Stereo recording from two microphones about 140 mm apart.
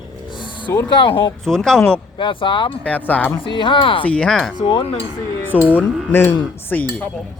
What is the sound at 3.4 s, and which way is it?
Speech, 35° left (ahead or behind).